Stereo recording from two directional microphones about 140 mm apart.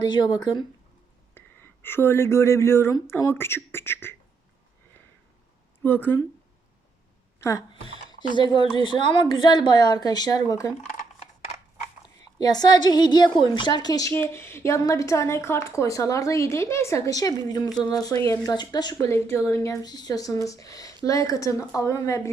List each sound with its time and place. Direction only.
0.0 s a woman's voice: 30° left (ahead or behind)
1.3 s speech: 15° left (ahead or behind)
5.8 s speech: 15° left (ahead or behind)
7.3 s a woman's voice: 20° left (ahead or behind)
8.4 s a woman's voice: 35° left (ahead or behind)
12.2 s speech: 30° left (ahead or behind)